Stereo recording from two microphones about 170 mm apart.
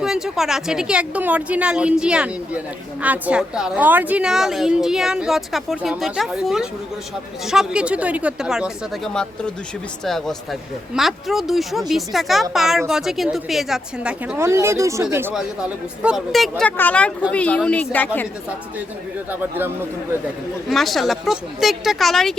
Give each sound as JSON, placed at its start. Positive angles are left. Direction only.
{"t": 0.0, "sound": "a woman's voice", "side_deg": -5}
{"t": 14.4, "sound": "a woman's voice", "side_deg": -15}
{"t": 19.3, "sound": "speech", "side_deg": -10}
{"t": 20.7, "sound": "a woman's voice", "side_deg": 0}